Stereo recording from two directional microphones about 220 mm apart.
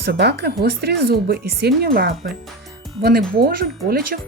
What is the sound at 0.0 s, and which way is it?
Speech, 50° right (ahead or behind).